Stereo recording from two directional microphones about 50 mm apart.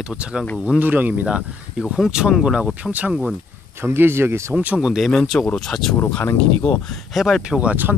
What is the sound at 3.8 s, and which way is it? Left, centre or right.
Speech, right.